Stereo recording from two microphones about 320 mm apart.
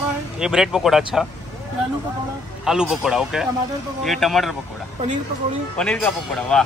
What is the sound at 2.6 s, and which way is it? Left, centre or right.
Speech, centre.